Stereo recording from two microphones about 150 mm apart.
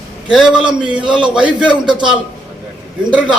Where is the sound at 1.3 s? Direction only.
5° right (ahead or behind).